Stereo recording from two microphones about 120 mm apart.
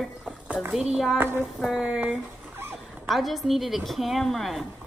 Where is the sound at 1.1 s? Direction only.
20° right (ahead or behind).